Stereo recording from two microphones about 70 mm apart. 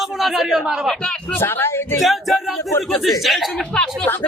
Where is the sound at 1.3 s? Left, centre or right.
Left.